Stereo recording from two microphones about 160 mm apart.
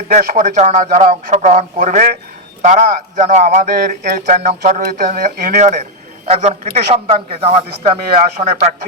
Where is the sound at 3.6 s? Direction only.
60° right (ahead or behind); by 7.6 s 40° right (ahead or behind).